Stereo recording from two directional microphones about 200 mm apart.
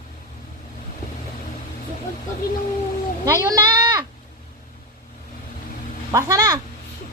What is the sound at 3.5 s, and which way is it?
Goat, 20° right (ahead or behind).